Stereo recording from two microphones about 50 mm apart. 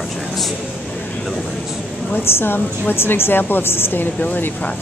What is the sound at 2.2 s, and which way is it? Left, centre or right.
A woman's voice, left.